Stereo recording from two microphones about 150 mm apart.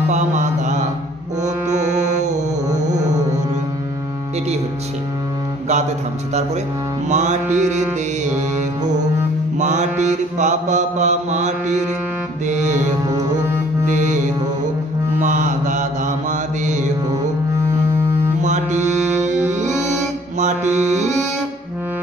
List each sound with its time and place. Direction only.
0.1 s mantra: 55° right (ahead or behind)
7.1 s mantra: 50° right (ahead or behind)
9.6 s mantra: 50° right (ahead or behind)
12.4 s music: 55° right (ahead or behind)
13.8 s music: 55° right (ahead or behind)
15.1 s mantra: 55° right (ahead or behind)
18.4 s music: 50° right (ahead or behind)